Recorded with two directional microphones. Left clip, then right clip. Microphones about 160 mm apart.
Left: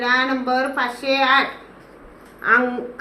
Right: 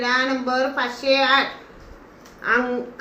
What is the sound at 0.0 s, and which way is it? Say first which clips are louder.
A woman's voice: left 2 dB; 20° left (ahead or behind).